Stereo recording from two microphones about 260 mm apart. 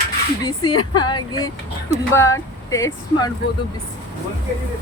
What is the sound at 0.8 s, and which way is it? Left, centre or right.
Speech, centre.